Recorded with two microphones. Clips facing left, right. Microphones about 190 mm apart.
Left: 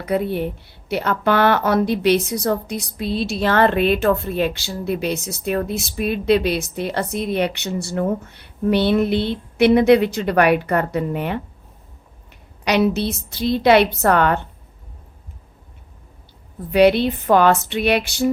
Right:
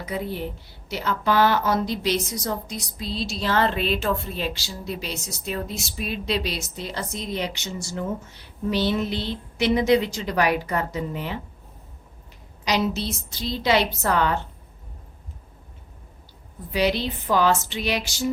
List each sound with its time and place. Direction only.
0.0 s a woman's voice: 60° left (ahead or behind)
12.6 s a woman's voice: 60° left (ahead or behind)
16.7 s a woman's voice: 60° left (ahead or behind)